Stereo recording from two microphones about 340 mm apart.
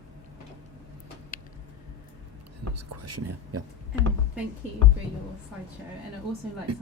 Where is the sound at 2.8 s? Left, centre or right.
Right.